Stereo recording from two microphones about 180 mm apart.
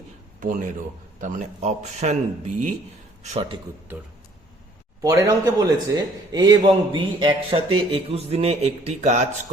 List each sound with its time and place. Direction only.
0.3 s a man's voice: 45° right (ahead or behind)
3.9 s a man's voice: 10° right (ahead or behind); by 9.2 s 35° right (ahead or behind)